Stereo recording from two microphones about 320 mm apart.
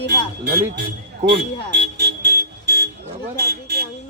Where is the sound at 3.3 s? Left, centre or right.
Right.